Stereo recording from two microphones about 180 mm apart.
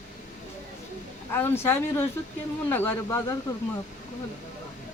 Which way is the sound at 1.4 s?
15° left (ahead or behind).